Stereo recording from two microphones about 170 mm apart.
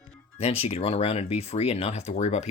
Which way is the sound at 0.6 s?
35° left (ahead or behind).